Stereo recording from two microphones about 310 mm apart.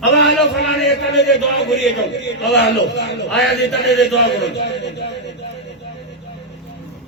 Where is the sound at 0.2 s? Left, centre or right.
Left.